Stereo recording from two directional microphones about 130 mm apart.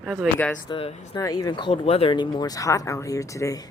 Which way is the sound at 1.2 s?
30° left (ahead or behind).